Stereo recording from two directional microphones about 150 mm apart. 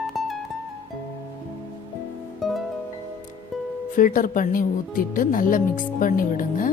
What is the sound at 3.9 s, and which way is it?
Speech, 65° left (ahead or behind).